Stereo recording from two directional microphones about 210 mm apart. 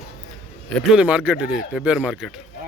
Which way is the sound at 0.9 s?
5° right (ahead or behind).